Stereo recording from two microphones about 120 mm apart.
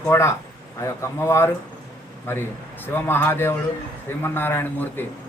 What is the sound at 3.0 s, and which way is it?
A man's voice, 20° left (ahead or behind).